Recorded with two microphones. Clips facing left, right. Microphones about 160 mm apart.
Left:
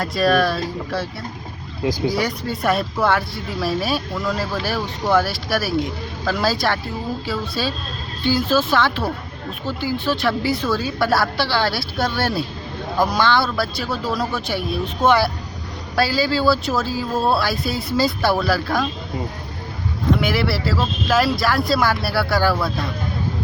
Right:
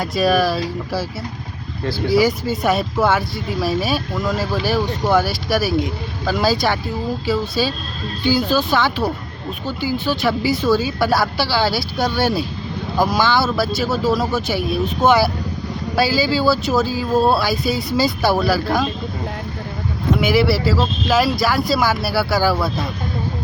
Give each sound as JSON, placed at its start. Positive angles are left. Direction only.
{"t": 0.0, "sound": "speech", "side_deg": 0}
{"t": 1.8, "sound": "speech", "side_deg": 15}
{"t": 2.1, "sound": "speech", "side_deg": 0}
{"t": 20.1, "sound": "speech", "side_deg": 0}